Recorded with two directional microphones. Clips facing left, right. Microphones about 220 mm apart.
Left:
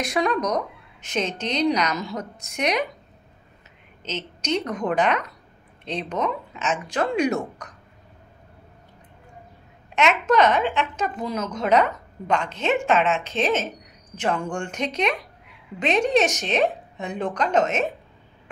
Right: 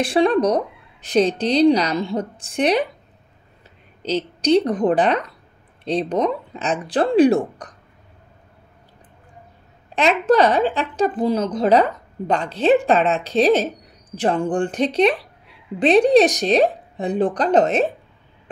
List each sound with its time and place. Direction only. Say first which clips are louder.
0.0 s speech: right 7 dB; 30° right (ahead or behind)
4.0 s speech: right 10 dB; 35° right (ahead or behind)
9.9 s speech: right 4 dB; 35° right (ahead or behind)